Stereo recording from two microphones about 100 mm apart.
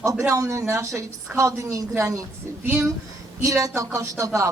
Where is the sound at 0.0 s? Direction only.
30° right (ahead or behind).